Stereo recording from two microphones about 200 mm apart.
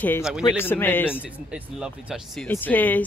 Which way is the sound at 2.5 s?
10° left (ahead or behind).